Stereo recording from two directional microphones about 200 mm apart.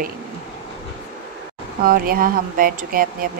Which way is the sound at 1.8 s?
45° right (ahead or behind).